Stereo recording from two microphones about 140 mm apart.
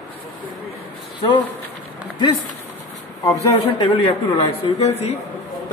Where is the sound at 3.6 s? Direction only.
45° left (ahead or behind).